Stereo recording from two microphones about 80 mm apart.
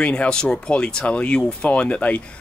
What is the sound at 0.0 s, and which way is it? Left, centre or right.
Speech, centre.